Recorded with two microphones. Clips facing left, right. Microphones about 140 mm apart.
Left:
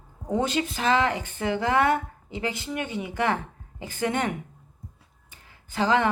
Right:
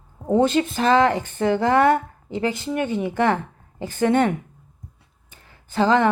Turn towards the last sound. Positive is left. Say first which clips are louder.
# right 5 dB
turn(degrees=-35)  # may be behind; listen again after turning